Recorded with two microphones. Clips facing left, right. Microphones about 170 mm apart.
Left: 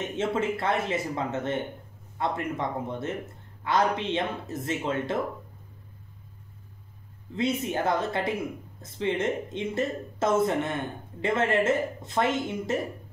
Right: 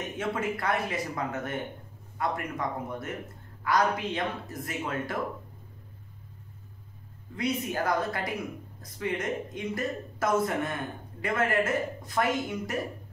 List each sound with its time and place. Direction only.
0.0 s speech: 25° left (ahead or behind)
7.3 s speech: 25° left (ahead or behind)